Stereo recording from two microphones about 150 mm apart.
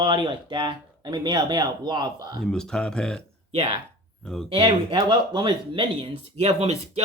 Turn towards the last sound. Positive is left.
turn(degrees=-45)  # may be behind; listen again after turning